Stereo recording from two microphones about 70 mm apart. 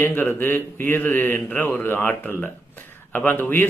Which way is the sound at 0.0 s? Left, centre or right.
Left.